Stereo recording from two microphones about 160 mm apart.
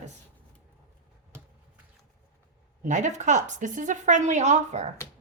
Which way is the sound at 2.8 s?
50° right (ahead or behind).